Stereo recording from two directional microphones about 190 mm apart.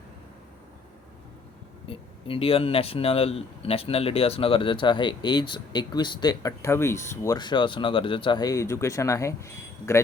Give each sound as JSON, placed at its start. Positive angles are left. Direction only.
{"t": 1.9, "sound": "speech", "side_deg": 30}